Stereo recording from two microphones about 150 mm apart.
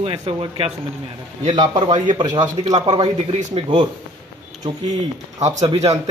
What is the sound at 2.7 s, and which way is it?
Speech, 40° right (ahead or behind).